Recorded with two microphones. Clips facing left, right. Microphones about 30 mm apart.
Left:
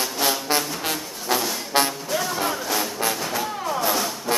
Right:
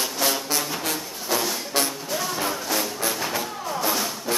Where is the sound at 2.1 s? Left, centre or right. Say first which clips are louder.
Left 2 dB; centre.